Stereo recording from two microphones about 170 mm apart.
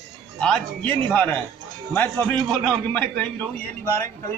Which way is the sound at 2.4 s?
5° left (ahead or behind).